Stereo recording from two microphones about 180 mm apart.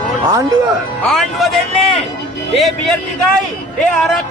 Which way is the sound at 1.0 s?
Centre (ahead or behind).